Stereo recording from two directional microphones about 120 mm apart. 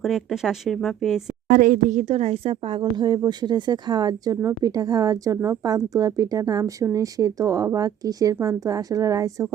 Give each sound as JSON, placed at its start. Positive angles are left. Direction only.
{"t": 0.0, "sound": "speech", "side_deg": 0}
{"t": 1.5, "sound": "speech", "side_deg": -90}